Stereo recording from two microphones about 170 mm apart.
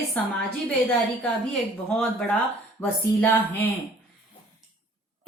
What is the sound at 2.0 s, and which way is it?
Speech, 5° left (ahead or behind).